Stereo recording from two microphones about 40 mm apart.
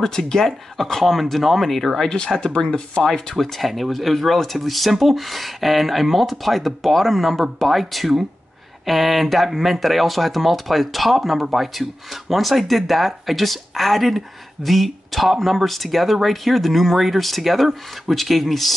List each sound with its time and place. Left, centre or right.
0.0 s speech: centre
2.0 s speech: centre
3.0 s speech: centre